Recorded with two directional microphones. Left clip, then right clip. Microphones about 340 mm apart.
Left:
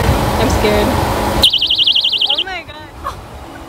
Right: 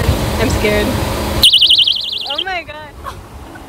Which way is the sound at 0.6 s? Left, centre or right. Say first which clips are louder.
Left 1 dB; centre.